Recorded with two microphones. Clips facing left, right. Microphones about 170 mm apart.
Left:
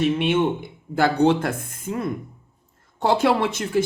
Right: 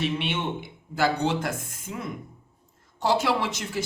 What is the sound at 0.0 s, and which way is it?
Speech, 50° left (ahead or behind).